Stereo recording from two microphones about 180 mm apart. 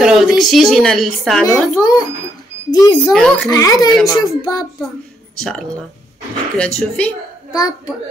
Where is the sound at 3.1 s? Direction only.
5° left (ahead or behind).